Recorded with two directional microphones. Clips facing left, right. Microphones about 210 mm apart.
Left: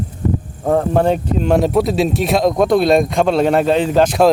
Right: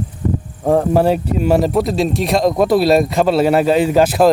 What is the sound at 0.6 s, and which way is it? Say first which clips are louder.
Speech: right 1 dB; 5° right (ahead or behind).